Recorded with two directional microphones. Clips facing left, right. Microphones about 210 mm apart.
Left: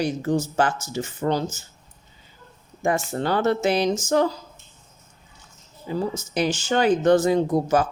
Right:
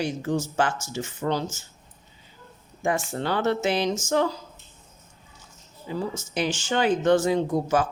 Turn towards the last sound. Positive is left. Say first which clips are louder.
# left 3 dB
turn(degrees=40)  # may be behind; listen again after turning